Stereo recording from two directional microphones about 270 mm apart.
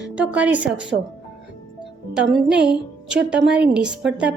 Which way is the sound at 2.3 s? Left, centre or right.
Centre.